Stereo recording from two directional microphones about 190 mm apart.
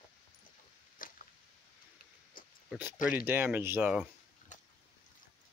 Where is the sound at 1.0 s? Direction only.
45° left (ahead or behind).